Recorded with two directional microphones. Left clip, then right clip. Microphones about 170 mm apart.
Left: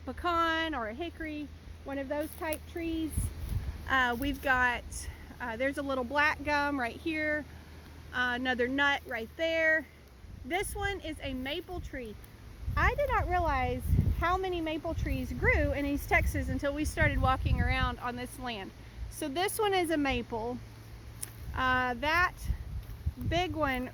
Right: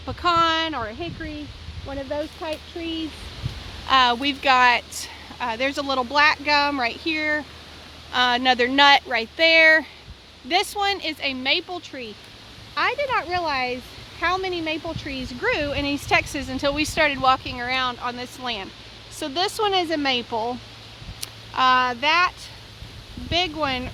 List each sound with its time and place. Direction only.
0.0 s speech: centre (ahead or behind)
1.9 s speech: 25° left (ahead or behind)
3.8 s speech: 10° right (ahead or behind)
8.1 s speech: 20° right (ahead or behind)
8.9 s speech: 30° right (ahead or behind)
10.8 s speech: 15° right (ahead or behind)
12.7 s speech: 5° right (ahead or behind)
21.5 s speech: centre (ahead or behind)
23.6 s speech: 5° left (ahead or behind)